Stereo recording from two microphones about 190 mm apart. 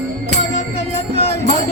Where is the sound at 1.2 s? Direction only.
30° left (ahead or behind).